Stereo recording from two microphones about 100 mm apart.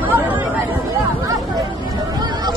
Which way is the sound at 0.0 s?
20° right (ahead or behind).